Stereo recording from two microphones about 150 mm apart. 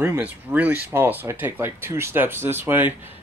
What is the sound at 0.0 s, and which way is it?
Speech, 15° right (ahead or behind).